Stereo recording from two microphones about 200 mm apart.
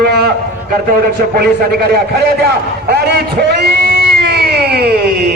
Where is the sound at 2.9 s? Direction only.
55° right (ahead or behind).